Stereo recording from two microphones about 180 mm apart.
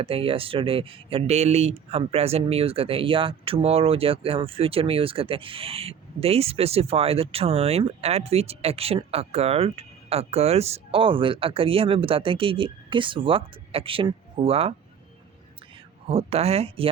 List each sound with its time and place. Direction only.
0.0 s speech: 30° right (ahead or behind)
16.0 s speech: 35° right (ahead or behind)